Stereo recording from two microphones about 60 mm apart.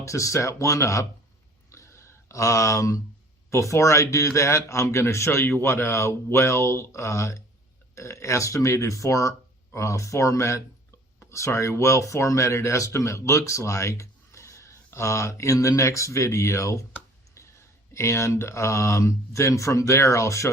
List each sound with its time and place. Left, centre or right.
0.0 s speech: left
1.7 s a sound: left
3.5 s speech: left
15.5 s speech: left